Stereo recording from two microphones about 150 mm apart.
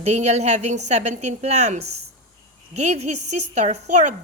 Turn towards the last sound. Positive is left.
turn(degrees=-55)  # may be behind; listen again after turning